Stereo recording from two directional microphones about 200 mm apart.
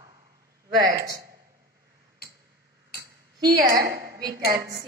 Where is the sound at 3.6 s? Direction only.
15° right (ahead or behind).